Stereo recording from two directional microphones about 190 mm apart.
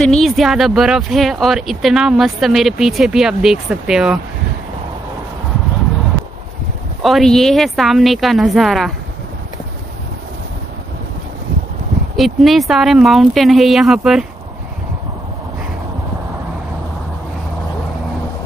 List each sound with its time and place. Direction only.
0.0 s speech: centre (ahead or behind)
7.0 s speech: centre (ahead or behind)
12.2 s speech: centre (ahead or behind)